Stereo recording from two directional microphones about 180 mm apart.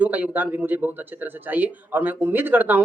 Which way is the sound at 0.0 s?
10° right (ahead or behind).